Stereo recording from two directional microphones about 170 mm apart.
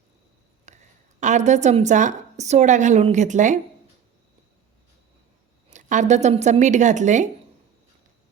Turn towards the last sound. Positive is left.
turn(degrees=-45)  # may be behind; listen again after turning